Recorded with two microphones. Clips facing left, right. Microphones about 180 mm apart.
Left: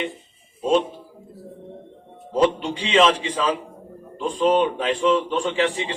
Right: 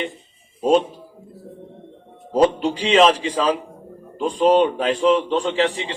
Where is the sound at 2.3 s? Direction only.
35° right (ahead or behind).